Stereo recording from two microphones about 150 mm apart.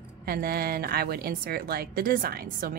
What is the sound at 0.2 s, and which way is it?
A woman's voice, 80° right.